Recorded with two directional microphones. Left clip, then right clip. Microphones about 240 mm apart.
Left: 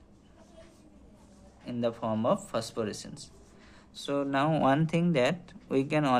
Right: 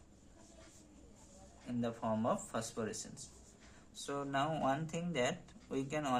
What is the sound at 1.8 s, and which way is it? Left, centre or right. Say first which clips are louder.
Speech: left 8 dB; left.